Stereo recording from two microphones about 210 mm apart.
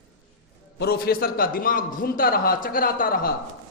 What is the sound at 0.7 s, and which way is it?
A man's voice, 50° left (ahead or behind).